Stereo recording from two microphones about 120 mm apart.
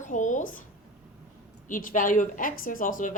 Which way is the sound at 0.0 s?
90° left.